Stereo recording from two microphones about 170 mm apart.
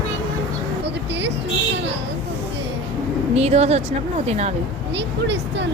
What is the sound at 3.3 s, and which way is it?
Speech, 40° right (ahead or behind).